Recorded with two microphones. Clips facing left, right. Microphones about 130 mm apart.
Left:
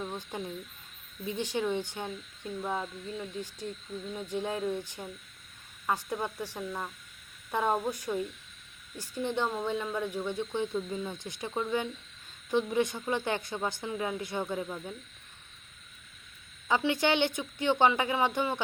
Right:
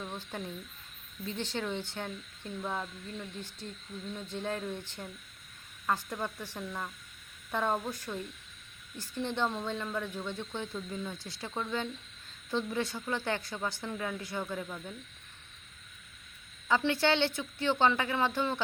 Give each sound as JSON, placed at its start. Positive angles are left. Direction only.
{"t": 0.0, "sound": "speech", "side_deg": 15}
{"t": 4.3, "sound": "speech", "side_deg": 15}
{"t": 16.6, "sound": "speech", "side_deg": 15}